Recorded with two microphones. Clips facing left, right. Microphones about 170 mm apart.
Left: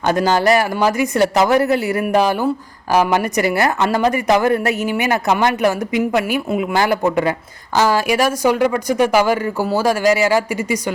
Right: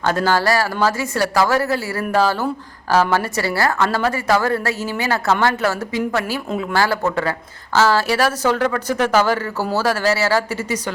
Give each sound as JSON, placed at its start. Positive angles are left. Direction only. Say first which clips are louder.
{"t": 0.0, "sound": "speech", "louder": "left 3 dB", "side_deg": 15}